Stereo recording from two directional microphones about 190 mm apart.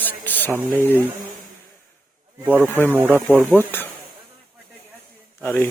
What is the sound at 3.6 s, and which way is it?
Speech, 10° left (ahead or behind).